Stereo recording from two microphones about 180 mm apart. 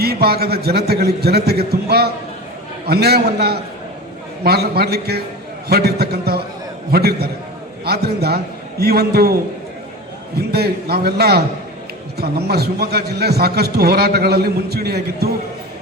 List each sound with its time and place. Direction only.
0.0 s a man's voice: 60° right (ahead or behind)
10.3 s a man's voice: 65° right (ahead or behind)